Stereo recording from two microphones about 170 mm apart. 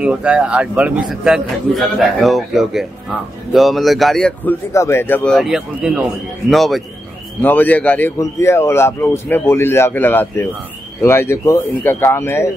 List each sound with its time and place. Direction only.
0.0 s speech: 5° right (ahead or behind)
4.7 s speech: 15° left (ahead or behind)
7.4 s a man's voice: 10° left (ahead or behind)